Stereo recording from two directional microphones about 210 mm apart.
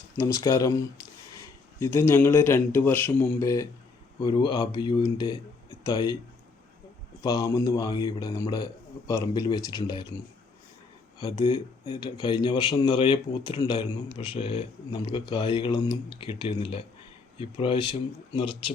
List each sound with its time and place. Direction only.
0.2 s speech: 15° left (ahead or behind)
7.2 s speech: 15° left (ahead or behind)
11.2 s speech: 20° left (ahead or behind)